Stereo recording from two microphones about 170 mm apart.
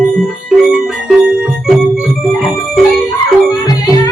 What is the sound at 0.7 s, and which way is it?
Music, 5° right (ahead or behind).